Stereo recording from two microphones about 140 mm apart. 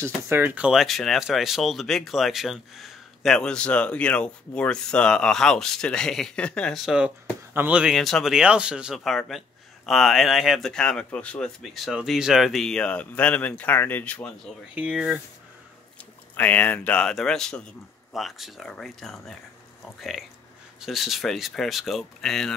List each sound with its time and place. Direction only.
0.0 s speech: 15° right (ahead or behind)
0.7 s speech: centre (ahead or behind)
14.8 s speech: 5° right (ahead or behind)
16.3 s speech: 10° left (ahead or behind)